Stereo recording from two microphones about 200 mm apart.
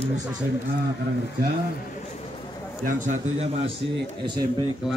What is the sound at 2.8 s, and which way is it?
Speech, 35° right (ahead or behind).